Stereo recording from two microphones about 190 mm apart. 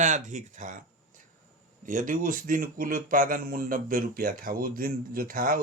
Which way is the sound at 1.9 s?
45° right (ahead or behind).